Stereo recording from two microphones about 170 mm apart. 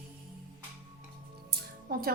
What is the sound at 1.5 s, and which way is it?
Music, 65° right (ahead or behind).